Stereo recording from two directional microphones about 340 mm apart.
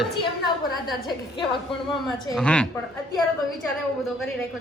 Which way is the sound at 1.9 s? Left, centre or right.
Centre.